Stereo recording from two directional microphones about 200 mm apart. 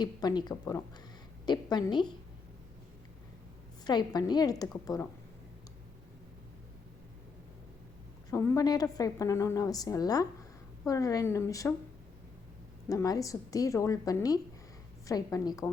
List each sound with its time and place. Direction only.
0.0 s a woman's voice: 20° left (ahead or behind)
3.8 s a woman's voice: 20° left (ahead or behind)
8.3 s a woman's voice: 15° left (ahead or behind)
12.9 s a woman's voice: 15° left (ahead or behind)